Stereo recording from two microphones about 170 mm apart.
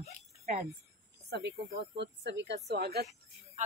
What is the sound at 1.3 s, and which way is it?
Speech, 90° right.